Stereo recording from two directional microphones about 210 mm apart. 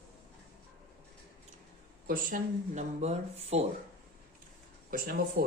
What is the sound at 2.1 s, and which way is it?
Speech, 40° right (ahead or behind).